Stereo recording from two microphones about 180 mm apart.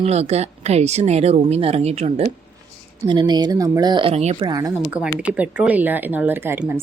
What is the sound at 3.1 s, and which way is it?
Speech, 25° right (ahead or behind).